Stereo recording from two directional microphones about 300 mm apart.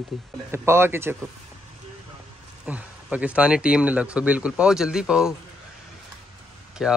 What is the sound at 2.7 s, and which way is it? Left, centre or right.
Speech, centre.